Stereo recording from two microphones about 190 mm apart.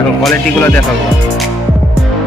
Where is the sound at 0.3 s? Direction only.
10° left (ahead or behind).